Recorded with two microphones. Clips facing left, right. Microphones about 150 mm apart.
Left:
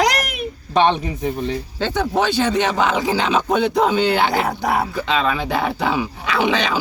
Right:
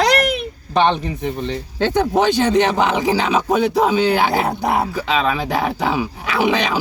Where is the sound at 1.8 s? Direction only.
15° right (ahead or behind).